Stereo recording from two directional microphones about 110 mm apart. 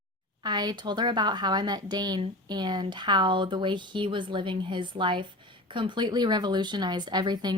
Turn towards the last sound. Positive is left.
turn(degrees=-40)  # may be behind; listen again after turning